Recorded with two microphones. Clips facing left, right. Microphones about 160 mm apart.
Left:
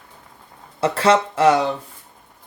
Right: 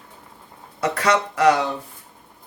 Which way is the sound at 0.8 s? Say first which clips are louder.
Left 4 dB; 30° left (ahead or behind).